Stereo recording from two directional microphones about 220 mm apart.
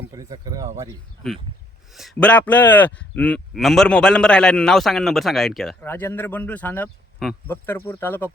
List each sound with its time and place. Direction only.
0.1 s speech: 15° right (ahead or behind)
1.9 s a man's voice: centre (ahead or behind)